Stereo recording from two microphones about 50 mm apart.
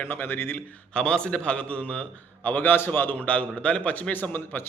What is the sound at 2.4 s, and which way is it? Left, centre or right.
Speech, left.